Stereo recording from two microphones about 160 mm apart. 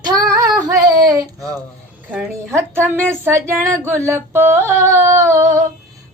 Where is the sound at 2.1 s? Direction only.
10° right (ahead or behind).